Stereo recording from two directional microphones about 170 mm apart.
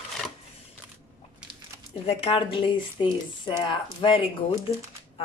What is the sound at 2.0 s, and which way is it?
Speech, 35° left (ahead or behind).